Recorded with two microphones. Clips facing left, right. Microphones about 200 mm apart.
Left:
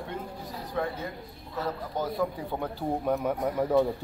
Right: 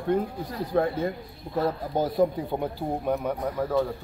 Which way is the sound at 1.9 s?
30° right (ahead or behind).